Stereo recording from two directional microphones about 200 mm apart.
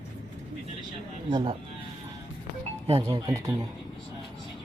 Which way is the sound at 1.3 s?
25° right (ahead or behind).